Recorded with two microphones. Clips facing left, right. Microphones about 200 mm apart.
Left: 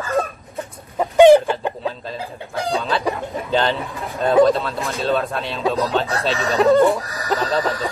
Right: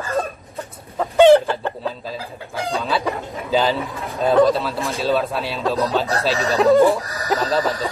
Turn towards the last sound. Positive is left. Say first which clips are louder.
# right 1 dB
turn(degrees=0)  # may be behind; listen again after turning